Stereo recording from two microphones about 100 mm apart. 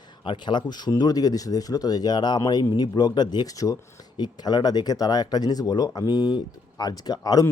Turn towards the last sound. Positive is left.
turn(degrees=40)  # may be behind; listen again after turning